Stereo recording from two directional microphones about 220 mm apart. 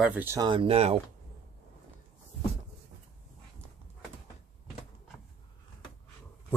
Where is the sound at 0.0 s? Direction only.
10° right (ahead or behind); by 0.9 s 25° right (ahead or behind).